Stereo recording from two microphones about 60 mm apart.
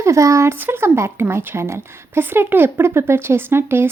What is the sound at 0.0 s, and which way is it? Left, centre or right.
Speech, right.